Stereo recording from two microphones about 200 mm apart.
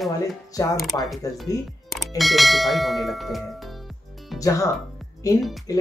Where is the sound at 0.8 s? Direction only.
Centre (ahead or behind).